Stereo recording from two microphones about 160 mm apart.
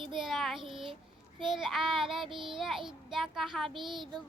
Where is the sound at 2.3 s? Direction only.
30° right (ahead or behind).